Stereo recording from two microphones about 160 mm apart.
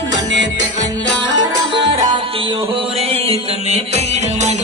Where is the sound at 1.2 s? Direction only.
30° right (ahead or behind).